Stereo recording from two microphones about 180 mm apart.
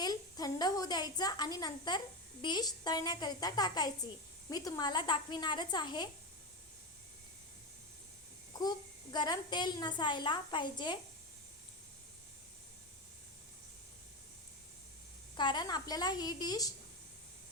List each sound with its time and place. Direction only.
0.0 s a woman's voice: 20° left (ahead or behind)
9.1 s a woman's voice: 25° left (ahead or behind)
15.4 s a woman's voice: 25° left (ahead or behind)